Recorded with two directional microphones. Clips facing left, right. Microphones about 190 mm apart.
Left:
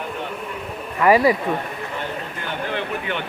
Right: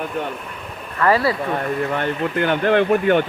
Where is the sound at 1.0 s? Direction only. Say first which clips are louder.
Left 2 dB; 15° left (ahead or behind).